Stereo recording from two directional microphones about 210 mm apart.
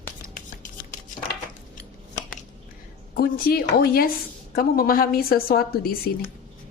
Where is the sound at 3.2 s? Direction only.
45° left (ahead or behind).